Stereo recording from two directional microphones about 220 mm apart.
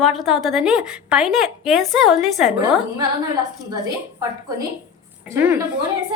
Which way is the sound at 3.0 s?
15° right (ahead or behind).